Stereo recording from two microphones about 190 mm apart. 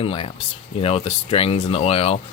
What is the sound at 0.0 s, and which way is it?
Speech, 30° left (ahead or behind).